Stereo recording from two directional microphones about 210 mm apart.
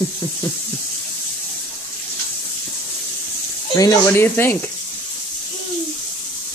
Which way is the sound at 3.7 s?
20° left (ahead or behind).